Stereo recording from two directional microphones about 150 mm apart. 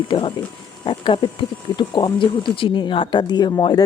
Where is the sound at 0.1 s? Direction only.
35° left (ahead or behind).